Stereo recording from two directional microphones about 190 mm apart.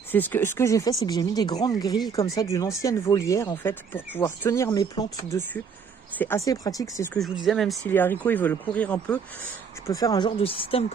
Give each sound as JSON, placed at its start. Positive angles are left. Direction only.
{"t": 0.1, "sound": "speech", "side_deg": 10}
{"t": 7.2, "sound": "speech", "side_deg": 0}
{"t": 9.8, "sound": "speech", "side_deg": 20}